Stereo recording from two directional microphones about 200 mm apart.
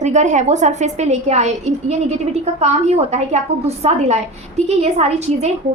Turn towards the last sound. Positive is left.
turn(degrees=-35)  # may be behind; listen again after turning